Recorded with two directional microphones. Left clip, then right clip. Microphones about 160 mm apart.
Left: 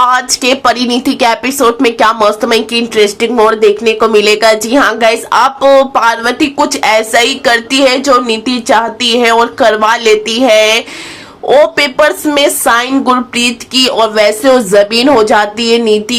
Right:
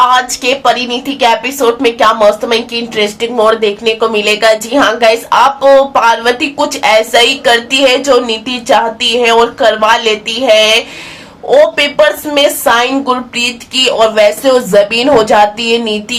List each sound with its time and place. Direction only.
0.1 s a woman's voice: 30° left (ahead or behind)